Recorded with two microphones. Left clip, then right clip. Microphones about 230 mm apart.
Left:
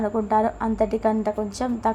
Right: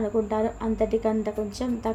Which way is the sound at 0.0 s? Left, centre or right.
Centre.